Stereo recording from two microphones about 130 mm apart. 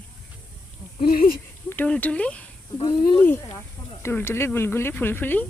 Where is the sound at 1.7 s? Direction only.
15° left (ahead or behind).